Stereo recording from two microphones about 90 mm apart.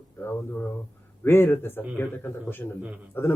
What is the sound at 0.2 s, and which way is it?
A man's voice, 20° left (ahead or behind).